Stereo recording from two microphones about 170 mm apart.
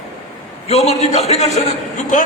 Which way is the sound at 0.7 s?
40° left (ahead or behind).